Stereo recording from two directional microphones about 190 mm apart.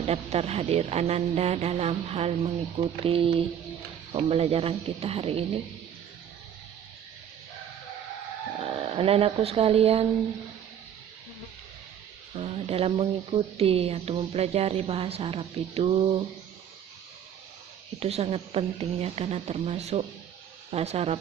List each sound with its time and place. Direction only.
0.0 s speech: 35° right (ahead or behind)
8.5 s speech: 30° right (ahead or behind)
12.4 s speech: 30° right (ahead or behind)
18.0 s speech: 30° right (ahead or behind)